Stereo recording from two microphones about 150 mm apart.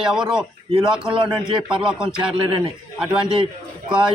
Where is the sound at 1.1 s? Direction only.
35° right (ahead or behind).